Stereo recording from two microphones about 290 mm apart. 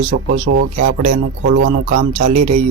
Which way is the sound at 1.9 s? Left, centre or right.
Right.